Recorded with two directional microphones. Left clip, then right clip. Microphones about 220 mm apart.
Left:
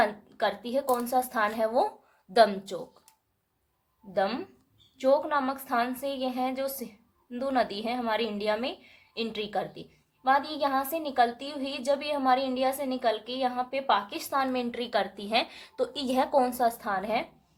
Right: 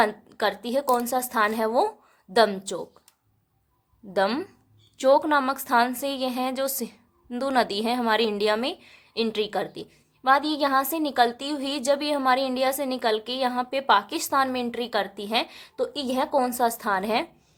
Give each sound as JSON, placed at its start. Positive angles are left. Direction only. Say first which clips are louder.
{"t": 0.0, "sound": "a woman's voice", "louder": "right 3 dB", "side_deg": -30}
{"t": 4.1, "sound": "a woman's voice", "louder": "right 4 dB", "side_deg": -35}